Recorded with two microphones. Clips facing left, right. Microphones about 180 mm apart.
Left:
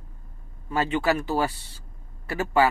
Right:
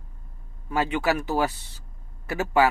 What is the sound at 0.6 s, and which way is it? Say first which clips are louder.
Speech: even; 15° right (ahead or behind).